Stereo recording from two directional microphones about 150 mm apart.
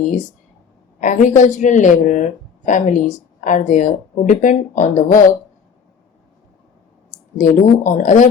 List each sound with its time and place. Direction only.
0.9 s speech: 55° left (ahead or behind)
7.1 s speech: 60° left (ahead or behind)